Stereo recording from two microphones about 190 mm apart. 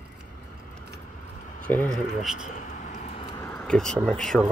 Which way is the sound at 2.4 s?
40° left (ahead or behind).